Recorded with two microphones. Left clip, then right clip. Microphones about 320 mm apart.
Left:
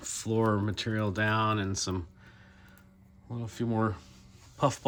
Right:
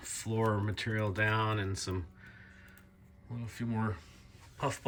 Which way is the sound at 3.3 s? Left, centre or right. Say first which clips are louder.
Left 7 dB; centre.